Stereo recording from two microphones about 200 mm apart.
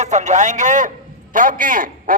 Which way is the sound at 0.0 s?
35° right (ahead or behind).